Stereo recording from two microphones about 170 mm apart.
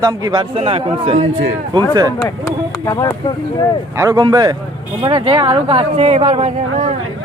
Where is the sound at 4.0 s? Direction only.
20° right (ahead or behind); by 7.0 s 40° right (ahead or behind).